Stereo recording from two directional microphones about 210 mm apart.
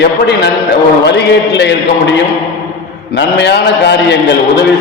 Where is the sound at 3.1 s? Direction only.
55° left (ahead or behind).